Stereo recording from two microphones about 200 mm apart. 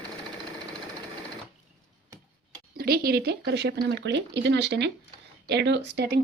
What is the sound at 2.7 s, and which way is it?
Speech, 50° right (ahead or behind).